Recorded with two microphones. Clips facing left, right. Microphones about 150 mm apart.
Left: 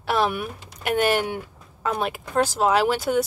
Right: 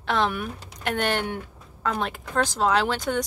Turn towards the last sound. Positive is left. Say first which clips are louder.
# left 3 dB
turn(degrees=10)  # may be behind; listen again after turning